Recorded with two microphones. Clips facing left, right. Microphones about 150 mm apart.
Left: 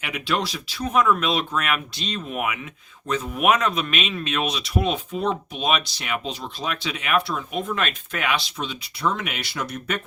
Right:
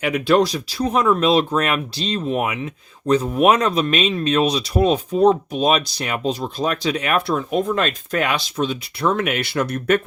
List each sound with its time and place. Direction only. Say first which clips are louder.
0.0 s speech: right 10 dB; 45° right (ahead or behind)